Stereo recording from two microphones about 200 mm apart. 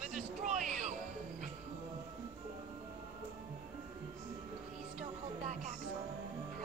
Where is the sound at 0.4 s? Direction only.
40° right (ahead or behind).